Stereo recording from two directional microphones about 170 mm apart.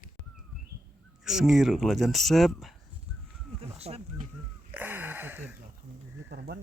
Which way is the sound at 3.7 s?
35° right (ahead or behind).